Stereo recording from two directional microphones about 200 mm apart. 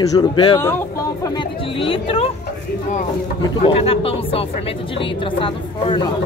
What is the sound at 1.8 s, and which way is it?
Speech, 25° left (ahead or behind).